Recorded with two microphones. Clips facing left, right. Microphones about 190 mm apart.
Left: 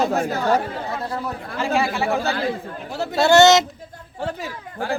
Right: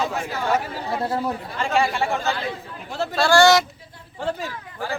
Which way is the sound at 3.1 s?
20° left (ahead or behind).